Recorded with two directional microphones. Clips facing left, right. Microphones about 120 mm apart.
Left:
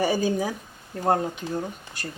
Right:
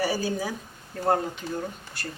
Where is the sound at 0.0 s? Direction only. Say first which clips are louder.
Left 4 dB; 20° left (ahead or behind).